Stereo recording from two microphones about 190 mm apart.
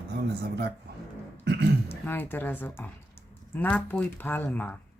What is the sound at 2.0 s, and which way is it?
Speech, 10° left (ahead or behind).